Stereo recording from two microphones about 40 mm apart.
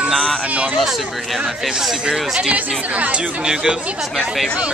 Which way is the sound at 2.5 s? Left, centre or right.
Right.